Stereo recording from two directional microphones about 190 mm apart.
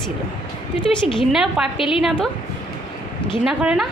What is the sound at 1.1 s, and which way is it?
Speech, centre (ahead or behind).